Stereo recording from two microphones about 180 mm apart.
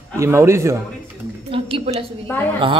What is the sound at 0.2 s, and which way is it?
Speech, 15° right (ahead or behind).